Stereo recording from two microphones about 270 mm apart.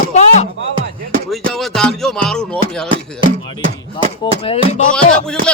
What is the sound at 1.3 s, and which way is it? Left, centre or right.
Speech, centre.